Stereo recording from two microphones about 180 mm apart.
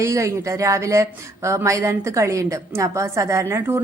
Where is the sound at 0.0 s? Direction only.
15° right (ahead or behind).